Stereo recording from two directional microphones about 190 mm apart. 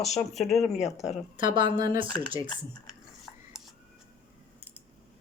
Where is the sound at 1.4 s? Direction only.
25° right (ahead or behind).